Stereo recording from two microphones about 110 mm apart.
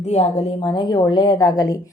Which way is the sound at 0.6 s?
45° left (ahead or behind).